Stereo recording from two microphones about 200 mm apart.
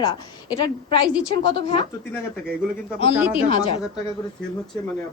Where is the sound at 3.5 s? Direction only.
25° left (ahead or behind).